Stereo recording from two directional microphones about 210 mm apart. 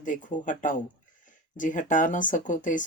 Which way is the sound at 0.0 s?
35° left (ahead or behind).